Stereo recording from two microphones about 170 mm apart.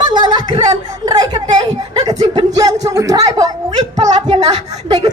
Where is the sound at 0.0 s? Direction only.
25° right (ahead or behind).